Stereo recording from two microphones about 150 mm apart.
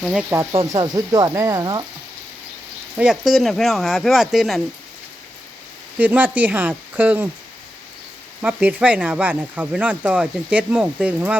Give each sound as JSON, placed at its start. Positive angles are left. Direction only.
{"t": 0.0, "sound": "speech", "side_deg": -5}
{"t": 0.6, "sound": "speech", "side_deg": -25}
{"t": 3.0, "sound": "speech", "side_deg": -5}
{"t": 6.0, "sound": "speech", "side_deg": -10}
{"t": 8.4, "sound": "speech", "side_deg": -10}